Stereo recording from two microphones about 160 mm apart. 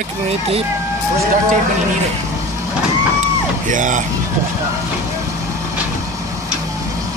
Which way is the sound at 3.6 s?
55° right (ahead or behind).